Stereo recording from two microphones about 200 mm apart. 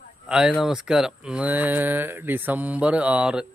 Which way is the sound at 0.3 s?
5° right (ahead or behind).